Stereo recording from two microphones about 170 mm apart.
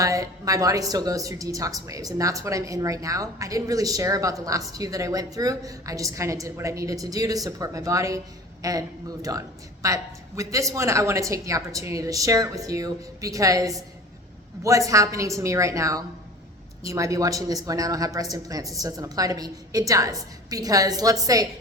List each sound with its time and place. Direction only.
0.0 s a woman's voice: 20° right (ahead or behind)